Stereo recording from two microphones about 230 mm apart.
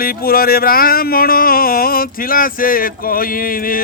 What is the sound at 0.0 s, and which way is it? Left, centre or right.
Speech, left.